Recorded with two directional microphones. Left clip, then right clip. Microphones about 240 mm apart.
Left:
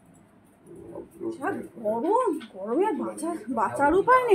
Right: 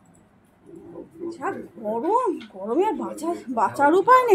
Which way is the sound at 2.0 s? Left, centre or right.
Right.